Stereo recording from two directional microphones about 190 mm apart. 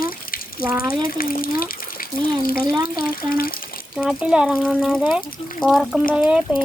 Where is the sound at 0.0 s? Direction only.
50° left (ahead or behind).